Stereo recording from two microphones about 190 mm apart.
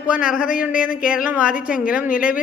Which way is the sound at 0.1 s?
5° right (ahead or behind).